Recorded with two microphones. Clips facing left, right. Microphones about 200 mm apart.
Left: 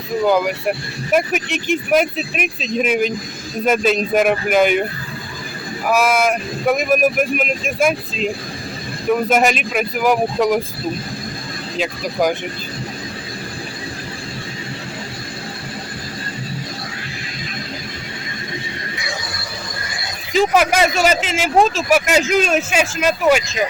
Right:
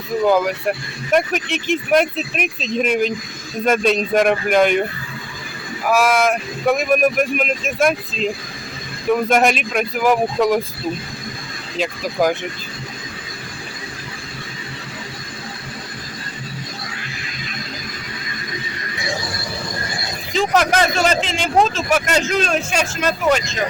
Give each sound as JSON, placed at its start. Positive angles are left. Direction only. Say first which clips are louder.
{"t": 0.3, "sound": "speech", "louder": "even", "side_deg": 0}
{"t": 5.9, "sound": "speech", "louder": "even", "side_deg": 0}
{"t": 11.8, "sound": "speech", "louder": "even", "side_deg": 0}
{"t": 20.3, "sound": "speech", "louder": "left 2 dB", "side_deg": 5}